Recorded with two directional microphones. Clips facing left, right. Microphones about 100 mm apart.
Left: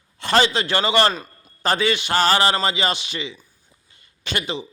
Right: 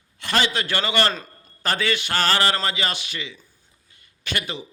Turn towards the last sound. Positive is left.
turn(degrees=25)  # may be behind; listen again after turning